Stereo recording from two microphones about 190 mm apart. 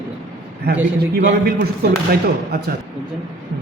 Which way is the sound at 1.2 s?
65° right (ahead or behind).